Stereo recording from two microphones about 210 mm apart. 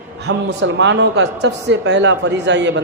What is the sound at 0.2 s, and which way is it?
A man's voice, 55° right (ahead or behind).